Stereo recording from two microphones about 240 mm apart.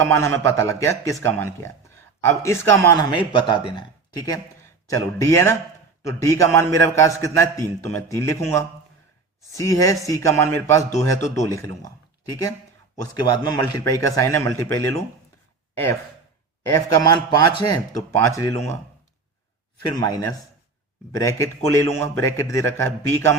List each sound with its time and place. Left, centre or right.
0.0 s a man's voice: centre
13.1 s a man's voice: centre
16.6 s a man's voice: centre
20.0 s a man's voice: centre